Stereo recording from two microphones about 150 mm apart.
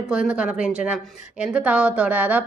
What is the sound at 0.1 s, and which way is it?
A woman's voice, 5° right (ahead or behind).